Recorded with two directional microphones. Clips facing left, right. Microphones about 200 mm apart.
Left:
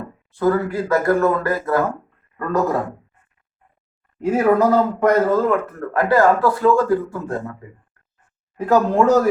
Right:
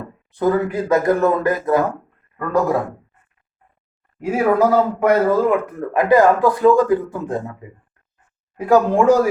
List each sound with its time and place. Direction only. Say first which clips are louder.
0.3 s speech: right 1 dB; 20° right (ahead or behind)
4.2 s a man's voice: even; 10° right (ahead or behind)
8.6 s a man's voice: right 2 dB; 10° right (ahead or behind)